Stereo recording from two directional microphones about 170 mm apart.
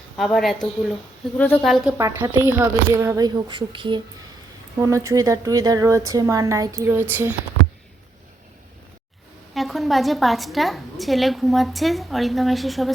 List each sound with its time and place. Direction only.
0.2 s a woman's voice: centre (ahead or behind)
1.9 s a woman's voice: 15° right (ahead or behind)
4.8 s a woman's voice: 20° right (ahead or behind)
9.6 s a woman's voice: centre (ahead or behind)